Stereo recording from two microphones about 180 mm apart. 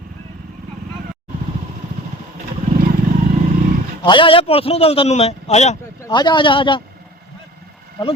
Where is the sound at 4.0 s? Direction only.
25° left (ahead or behind).